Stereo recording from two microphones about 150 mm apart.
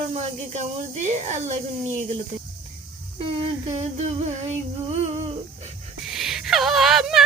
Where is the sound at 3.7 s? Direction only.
45° right (ahead or behind).